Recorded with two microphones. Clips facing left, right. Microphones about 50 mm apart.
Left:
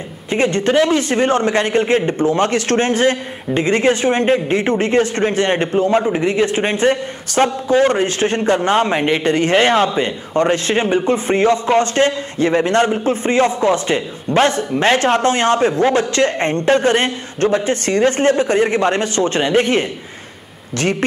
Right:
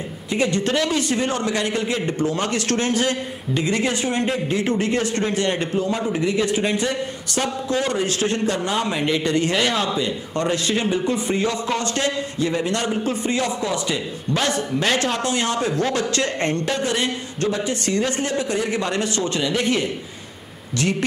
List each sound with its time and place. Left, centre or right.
0.3 s a man's voice: left